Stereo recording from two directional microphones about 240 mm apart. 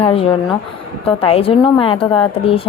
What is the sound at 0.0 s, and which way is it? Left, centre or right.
A woman's voice, left.